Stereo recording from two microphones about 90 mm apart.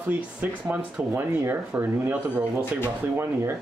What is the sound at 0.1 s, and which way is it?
Speech, 20° right (ahead or behind).